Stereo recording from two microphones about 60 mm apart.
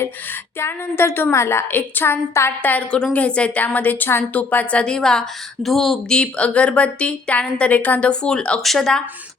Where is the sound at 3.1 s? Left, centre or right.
Left; by 5.9 s centre.